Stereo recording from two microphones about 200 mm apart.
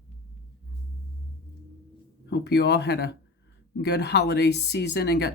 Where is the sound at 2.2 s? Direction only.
55° left (ahead or behind).